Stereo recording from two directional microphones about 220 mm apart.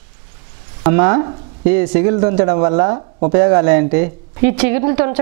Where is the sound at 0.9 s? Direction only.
15° right (ahead or behind).